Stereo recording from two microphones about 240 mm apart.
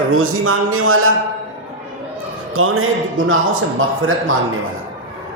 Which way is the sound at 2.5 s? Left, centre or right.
Right.